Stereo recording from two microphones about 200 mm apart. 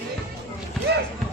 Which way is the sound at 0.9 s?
55° right (ahead or behind).